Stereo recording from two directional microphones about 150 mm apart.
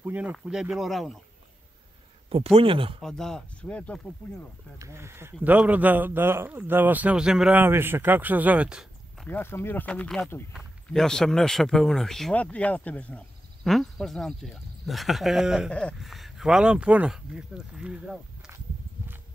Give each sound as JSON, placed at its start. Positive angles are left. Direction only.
{"t": 0.0, "sound": "speech", "side_deg": -10}
{"t": 2.2, "sound": "speech", "side_deg": -40}
{"t": 3.0, "sound": "speech", "side_deg": 5}
{"t": 4.7, "sound": "speech", "side_deg": -20}
{"t": 9.3, "sound": "speech", "side_deg": 15}